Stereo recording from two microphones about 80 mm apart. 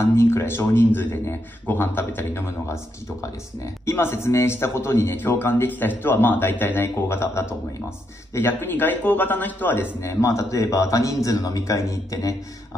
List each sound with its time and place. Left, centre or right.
0.0 s a man's voice: left
9.9 s a man's voice: left